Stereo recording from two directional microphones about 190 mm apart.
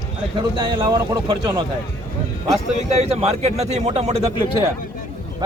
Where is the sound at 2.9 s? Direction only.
35° right (ahead or behind).